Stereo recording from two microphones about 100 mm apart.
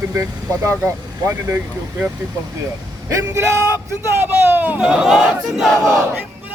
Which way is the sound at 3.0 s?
30° right (ahead or behind).